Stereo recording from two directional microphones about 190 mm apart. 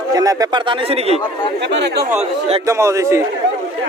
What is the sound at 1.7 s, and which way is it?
Speech, 60° right (ahead or behind).